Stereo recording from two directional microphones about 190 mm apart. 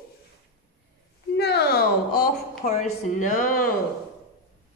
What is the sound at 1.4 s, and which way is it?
Speech, 60° left (ahead or behind).